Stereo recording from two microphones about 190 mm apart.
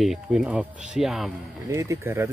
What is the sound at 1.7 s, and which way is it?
Speech, 15° right (ahead or behind).